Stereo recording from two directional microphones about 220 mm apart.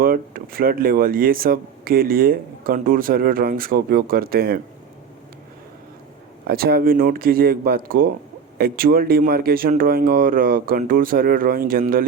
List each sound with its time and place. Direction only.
0.0 s speech: 40° right (ahead or behind)
6.5 s speech: 45° right (ahead or behind)